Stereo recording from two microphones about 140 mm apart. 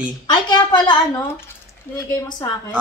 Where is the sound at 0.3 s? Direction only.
30° left (ahead or behind).